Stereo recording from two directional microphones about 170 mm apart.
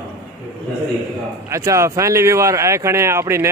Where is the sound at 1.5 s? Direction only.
15° right (ahead or behind).